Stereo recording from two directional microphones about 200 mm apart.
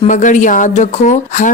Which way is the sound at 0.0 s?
40° left (ahead or behind).